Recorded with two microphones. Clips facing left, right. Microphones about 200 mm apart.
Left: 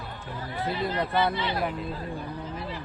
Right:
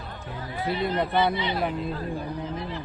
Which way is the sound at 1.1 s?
20° right (ahead or behind).